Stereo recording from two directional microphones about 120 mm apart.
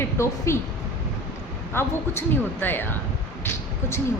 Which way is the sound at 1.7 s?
20° left (ahead or behind).